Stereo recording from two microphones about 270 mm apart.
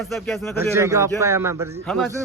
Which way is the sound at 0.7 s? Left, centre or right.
Centre.